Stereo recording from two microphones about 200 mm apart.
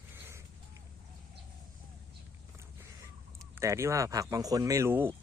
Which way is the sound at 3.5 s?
15° right (ahead or behind).